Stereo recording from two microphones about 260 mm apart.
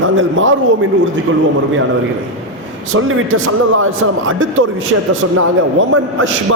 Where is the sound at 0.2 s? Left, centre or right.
Right.